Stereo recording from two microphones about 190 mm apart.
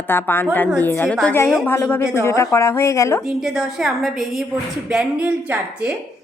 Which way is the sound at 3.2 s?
Centre (ahead or behind).